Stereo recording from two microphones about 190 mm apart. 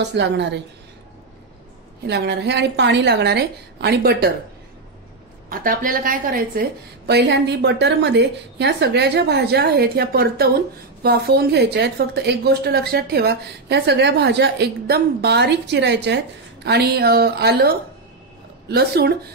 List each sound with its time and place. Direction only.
0.0 s a woman's voice: 65° right (ahead or behind)
2.0 s a woman's voice: 65° right (ahead or behind)
5.5 s a woman's voice: 45° right (ahead or behind)